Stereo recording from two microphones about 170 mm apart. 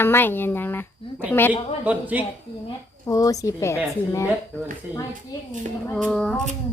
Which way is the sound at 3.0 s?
20° left (ahead or behind).